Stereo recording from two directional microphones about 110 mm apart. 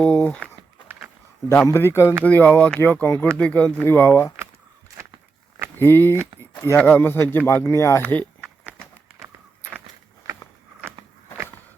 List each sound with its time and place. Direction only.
0.0 s speech: 10° left (ahead or behind)
1.5 s speech: 25° left (ahead or behind)
5.8 s speech: 20° left (ahead or behind)
8.1 s a sound: 15° left (ahead or behind)